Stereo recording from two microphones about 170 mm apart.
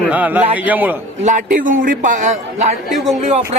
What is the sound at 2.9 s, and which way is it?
Speech, centre (ahead or behind).